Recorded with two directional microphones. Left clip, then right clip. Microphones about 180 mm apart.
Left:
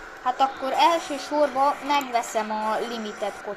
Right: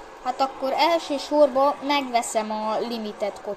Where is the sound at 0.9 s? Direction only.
45° right (ahead or behind).